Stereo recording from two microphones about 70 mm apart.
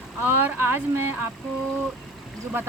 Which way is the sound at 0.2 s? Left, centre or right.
Right.